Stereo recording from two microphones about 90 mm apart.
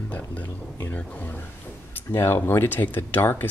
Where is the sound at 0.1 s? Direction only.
15° left (ahead or behind).